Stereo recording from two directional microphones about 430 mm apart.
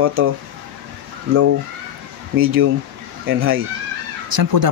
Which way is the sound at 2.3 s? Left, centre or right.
Right.